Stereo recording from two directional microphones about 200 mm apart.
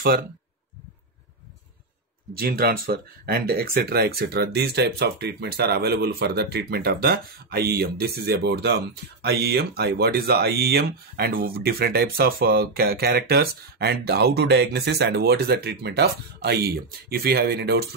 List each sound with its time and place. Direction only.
2.3 s speech: 50° right (ahead or behind)